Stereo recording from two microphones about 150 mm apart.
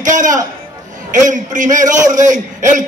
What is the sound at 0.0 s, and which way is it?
A man's voice, 55° right (ahead or behind).